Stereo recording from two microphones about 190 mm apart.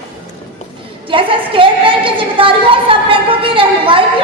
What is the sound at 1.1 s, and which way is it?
A woman's voice, 25° right (ahead or behind).